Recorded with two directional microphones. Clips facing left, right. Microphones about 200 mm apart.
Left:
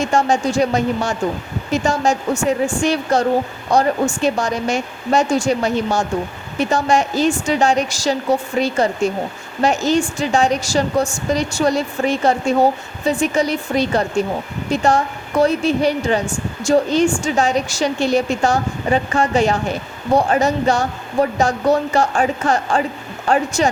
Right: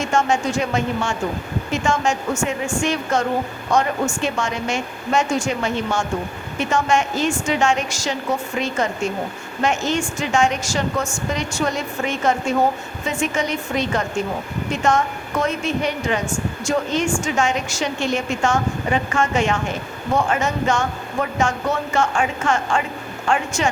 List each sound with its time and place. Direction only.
0.0 s a woman's voice: 35° left (ahead or behind)